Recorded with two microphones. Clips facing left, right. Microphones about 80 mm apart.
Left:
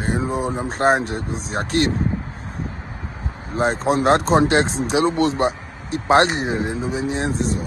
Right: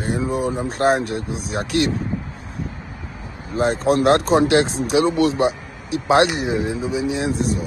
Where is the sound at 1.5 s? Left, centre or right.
Left.